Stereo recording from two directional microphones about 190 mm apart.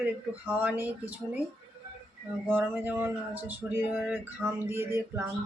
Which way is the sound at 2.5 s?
10° right (ahead or behind).